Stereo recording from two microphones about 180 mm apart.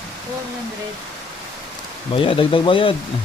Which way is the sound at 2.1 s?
30° left (ahead or behind).